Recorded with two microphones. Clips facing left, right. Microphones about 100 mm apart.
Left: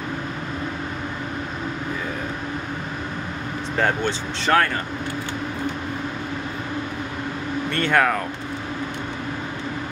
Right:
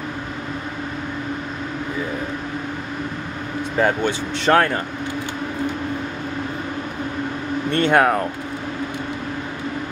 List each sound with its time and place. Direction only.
3.7 s speech: 10° right (ahead or behind)
4.5 s speech: 30° right (ahead or behind)
7.7 s speech: 20° right (ahead or behind)